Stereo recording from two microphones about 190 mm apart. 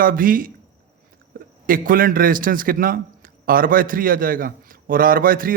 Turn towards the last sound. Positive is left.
turn(degrees=-50)  # may be behind; listen again after turning